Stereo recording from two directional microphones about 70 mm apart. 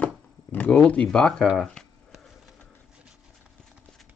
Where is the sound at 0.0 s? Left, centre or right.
Left.